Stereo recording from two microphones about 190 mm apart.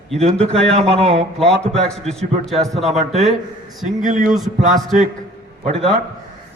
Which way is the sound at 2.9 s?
35° right (ahead or behind).